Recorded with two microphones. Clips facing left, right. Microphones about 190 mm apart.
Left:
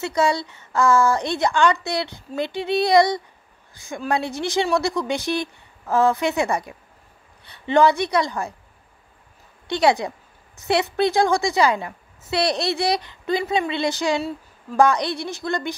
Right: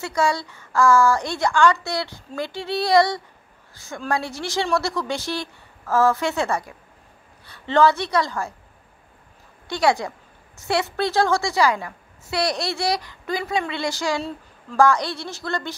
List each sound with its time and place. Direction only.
0.0 s a woman's voice: 20° left (ahead or behind)
9.7 s a woman's voice: 20° left (ahead or behind)